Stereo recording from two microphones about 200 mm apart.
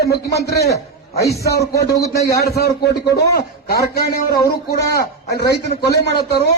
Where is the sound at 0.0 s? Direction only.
55° left (ahead or behind).